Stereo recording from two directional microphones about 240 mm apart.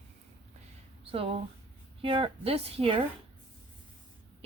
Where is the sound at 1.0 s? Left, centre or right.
Right.